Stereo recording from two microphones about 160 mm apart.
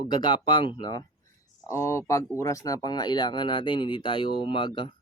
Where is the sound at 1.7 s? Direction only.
15° left (ahead or behind).